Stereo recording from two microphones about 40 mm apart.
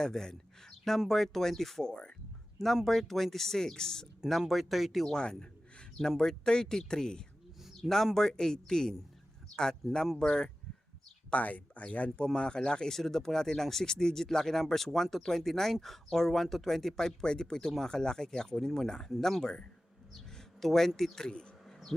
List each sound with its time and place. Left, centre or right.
0.0 s speech: centre
2.8 s speech: centre
4.3 s speech: centre
6.0 s speech: centre
7.6 s speech: centre
9.8 s speech: centre
10.2 s speech: centre
11.3 s speech: left
12.1 s speech: left
20.1 s a sound: centre
21.2 s speech: left